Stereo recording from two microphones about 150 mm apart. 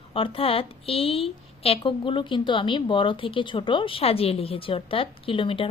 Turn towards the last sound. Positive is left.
turn(degrees=35)  # may be behind; listen again after turning